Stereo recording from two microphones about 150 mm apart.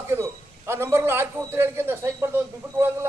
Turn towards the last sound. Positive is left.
turn(degrees=-15)  # may be behind; listen again after turning